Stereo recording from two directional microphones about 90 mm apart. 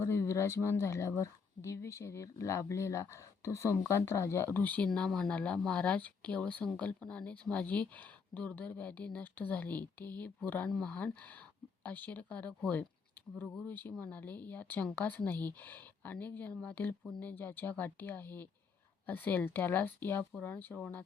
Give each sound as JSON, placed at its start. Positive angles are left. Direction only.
{"t": 0.0, "sound": "speech", "side_deg": 30}